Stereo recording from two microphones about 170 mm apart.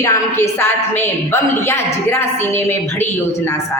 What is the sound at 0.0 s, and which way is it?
A woman's voice, 15° left (ahead or behind).